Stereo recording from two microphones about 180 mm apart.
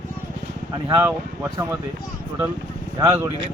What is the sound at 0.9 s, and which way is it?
Speech, 20° right (ahead or behind).